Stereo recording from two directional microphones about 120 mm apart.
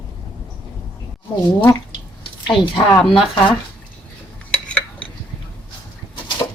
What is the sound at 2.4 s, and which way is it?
Speech, 45° left (ahead or behind).